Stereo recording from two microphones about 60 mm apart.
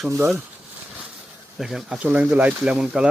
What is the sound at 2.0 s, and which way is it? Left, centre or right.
Speech, right.